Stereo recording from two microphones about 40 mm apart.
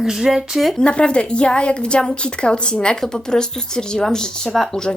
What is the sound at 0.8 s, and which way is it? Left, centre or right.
A woman's voice, left.